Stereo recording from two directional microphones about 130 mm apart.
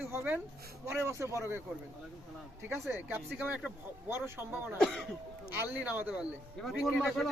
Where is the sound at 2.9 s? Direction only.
15° right (ahead or behind).